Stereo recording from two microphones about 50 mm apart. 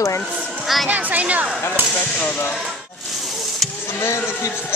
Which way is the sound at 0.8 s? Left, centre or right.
Right.